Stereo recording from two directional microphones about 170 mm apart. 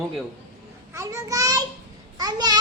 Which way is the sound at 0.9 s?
20° right (ahead or behind).